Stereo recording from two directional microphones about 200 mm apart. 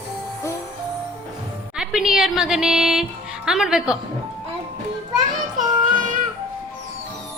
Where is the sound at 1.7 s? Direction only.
Centre (ahead or behind).